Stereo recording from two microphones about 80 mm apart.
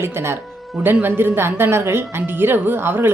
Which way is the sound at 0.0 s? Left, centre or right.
Right.